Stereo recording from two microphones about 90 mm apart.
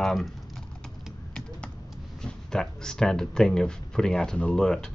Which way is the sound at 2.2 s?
5° left (ahead or behind).